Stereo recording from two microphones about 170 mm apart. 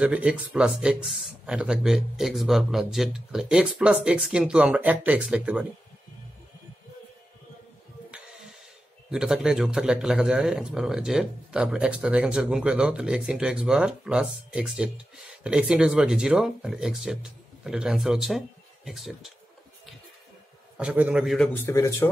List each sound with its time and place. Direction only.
0.0 s speech: 10° right (ahead or behind)
9.1 s speech: 5° right (ahead or behind)
20.7 s speech: 10° right (ahead or behind)
21.6 s speech: 15° left (ahead or behind)